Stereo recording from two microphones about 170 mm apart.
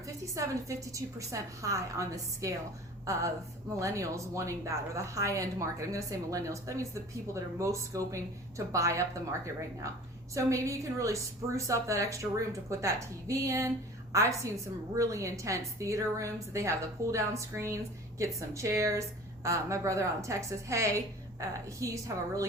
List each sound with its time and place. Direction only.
0.3 s a woman's voice: 20° right (ahead or behind)
10.3 s a woman's voice: 20° right (ahead or behind)